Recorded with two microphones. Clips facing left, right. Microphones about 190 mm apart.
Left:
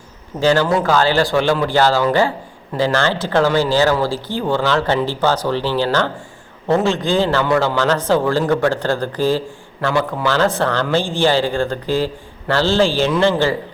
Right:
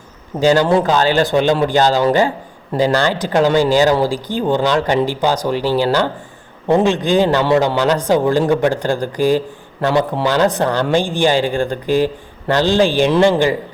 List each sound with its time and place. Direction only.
0.3 s a man's voice: 15° right (ahead or behind)